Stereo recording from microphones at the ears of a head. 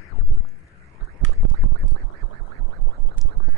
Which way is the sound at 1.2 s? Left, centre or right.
Right.